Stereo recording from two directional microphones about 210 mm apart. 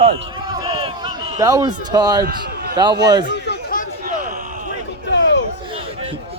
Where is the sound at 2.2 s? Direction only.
45° right (ahead or behind).